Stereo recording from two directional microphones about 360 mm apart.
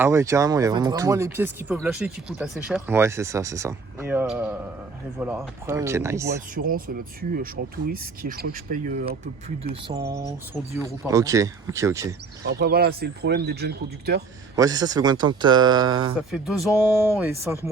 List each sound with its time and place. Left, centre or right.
0.0 s speech: centre
6.6 s speech: right
9.9 s speech: centre
12.5 s speech: right
14.5 s speech: centre
16.3 s speech: centre